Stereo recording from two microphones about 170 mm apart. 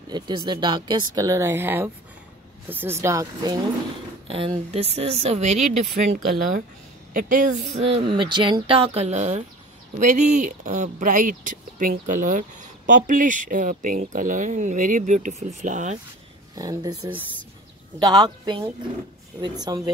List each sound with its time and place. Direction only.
0.1 s speech: 25° right (ahead or behind)
4.3 s speech: 35° right (ahead or behind)
7.9 s speech: 30° right (ahead or behind); by 16.0 s 45° right (ahead or behind)
16.5 s speech: 20° right (ahead or behind)